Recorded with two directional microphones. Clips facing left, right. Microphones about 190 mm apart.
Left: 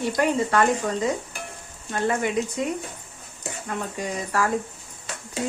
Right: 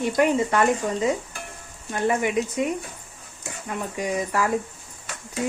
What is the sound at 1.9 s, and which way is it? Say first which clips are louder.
Speech: right 1 dB; 15° right (ahead or behind).